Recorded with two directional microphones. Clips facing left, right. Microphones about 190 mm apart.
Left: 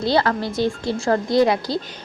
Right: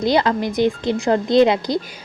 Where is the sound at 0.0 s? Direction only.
15° right (ahead or behind).